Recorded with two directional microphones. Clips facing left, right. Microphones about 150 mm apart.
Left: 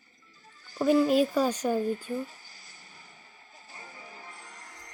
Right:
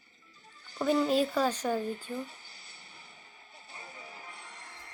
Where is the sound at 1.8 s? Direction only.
35° left (ahead or behind).